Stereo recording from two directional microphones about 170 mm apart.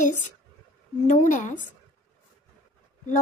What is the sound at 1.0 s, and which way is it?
Speech, 50° left (ahead or behind).